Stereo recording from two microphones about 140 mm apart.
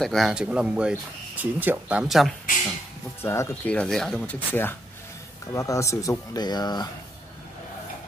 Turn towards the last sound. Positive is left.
turn(degrees=30)  # may be behind; listen again after turning